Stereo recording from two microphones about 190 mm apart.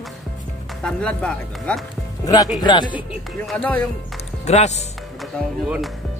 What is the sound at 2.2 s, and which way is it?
Speech, 20° left (ahead or behind).